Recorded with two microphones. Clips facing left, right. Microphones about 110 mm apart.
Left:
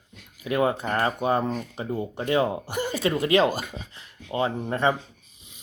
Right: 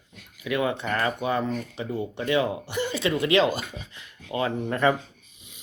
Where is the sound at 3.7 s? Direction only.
30° left (ahead or behind).